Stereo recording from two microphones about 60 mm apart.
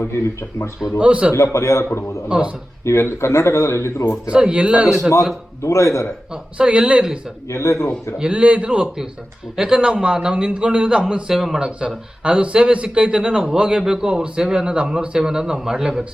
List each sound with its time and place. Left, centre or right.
0.1 s speech: left
0.9 s a man's voice: centre
1.3 s speech: left
2.3 s a man's voice: centre
2.8 s speech: left
4.3 s a man's voice: centre
5.6 s a man's voice: left
6.3 s a man's voice: centre
7.4 s speech: left
8.2 s a man's voice: centre